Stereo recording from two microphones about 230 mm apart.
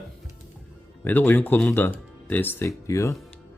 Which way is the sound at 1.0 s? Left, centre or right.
Centre.